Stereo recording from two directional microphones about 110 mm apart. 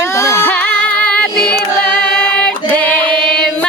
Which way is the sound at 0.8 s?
10° left (ahead or behind).